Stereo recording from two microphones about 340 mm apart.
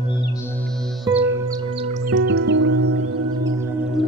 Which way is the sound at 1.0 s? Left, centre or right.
Centre.